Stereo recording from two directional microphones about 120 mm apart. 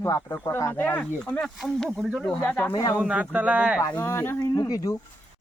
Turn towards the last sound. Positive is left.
turn(degrees=30)  # may be behind; listen again after turning